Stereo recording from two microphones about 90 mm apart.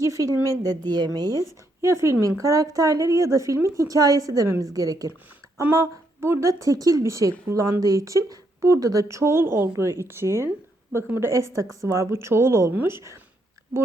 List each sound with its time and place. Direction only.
0.0 s a sound: 35° right (ahead or behind)
0.4 s speech: 45° right (ahead or behind)
1.3 s speech: 35° left (ahead or behind)
1.8 s speech: 30° right (ahead or behind)
6.1 s speech: 30° right (ahead or behind)